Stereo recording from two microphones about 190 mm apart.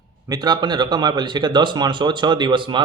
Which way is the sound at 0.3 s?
20° right (ahead or behind).